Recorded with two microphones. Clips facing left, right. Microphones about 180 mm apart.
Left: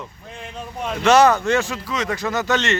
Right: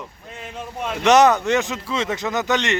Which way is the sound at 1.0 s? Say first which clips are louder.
Even; 20° right (ahead or behind).